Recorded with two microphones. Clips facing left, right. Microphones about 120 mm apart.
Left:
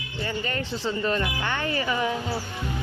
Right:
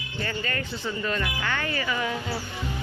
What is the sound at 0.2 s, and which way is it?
Speech, 20° left (ahead or behind).